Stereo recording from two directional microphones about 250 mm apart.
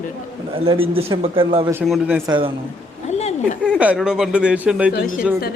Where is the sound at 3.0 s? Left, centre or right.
Left.